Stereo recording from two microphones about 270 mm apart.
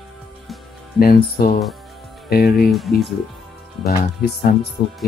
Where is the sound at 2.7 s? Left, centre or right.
Centre.